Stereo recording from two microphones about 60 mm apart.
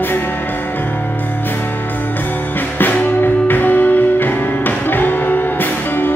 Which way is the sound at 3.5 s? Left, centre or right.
Left.